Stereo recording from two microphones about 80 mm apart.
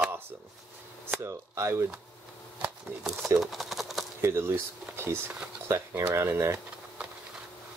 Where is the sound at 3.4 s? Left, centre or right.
Centre.